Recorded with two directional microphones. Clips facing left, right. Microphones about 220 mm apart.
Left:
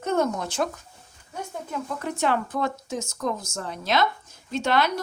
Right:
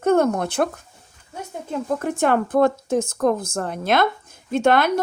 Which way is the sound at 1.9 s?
50° right (ahead or behind).